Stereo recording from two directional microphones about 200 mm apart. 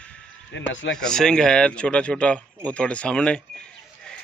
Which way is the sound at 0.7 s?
65° left (ahead or behind).